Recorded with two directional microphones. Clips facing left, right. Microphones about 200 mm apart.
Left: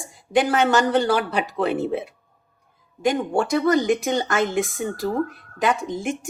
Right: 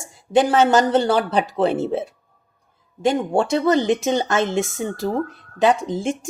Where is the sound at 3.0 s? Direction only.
30° right (ahead or behind).